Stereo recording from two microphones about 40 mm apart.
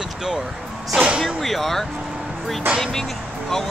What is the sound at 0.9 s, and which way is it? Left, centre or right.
Speech, right.